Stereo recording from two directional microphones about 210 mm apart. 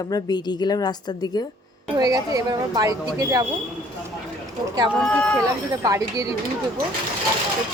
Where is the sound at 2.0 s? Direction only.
15° right (ahead or behind).